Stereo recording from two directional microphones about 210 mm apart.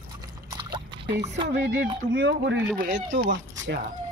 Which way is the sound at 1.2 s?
35° right (ahead or behind).